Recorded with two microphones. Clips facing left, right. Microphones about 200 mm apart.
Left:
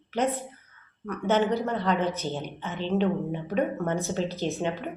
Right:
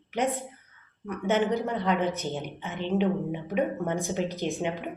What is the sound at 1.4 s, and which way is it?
Speech, 15° right (ahead or behind).